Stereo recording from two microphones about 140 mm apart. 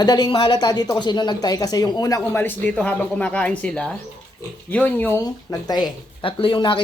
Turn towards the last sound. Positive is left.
turn(degrees=35)  # may be behind; listen again after turning